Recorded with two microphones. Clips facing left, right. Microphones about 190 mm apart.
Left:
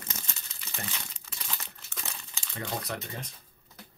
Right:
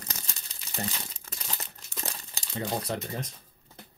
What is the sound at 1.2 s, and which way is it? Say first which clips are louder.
Crumpling: right 2 dB; 40° right (ahead or behind).